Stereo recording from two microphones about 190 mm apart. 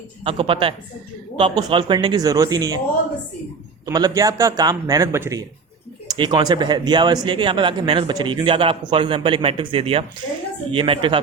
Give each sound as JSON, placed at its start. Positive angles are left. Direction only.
{"t": 0.3, "sound": "speech", "side_deg": -30}
{"t": 3.8, "sound": "speech", "side_deg": -20}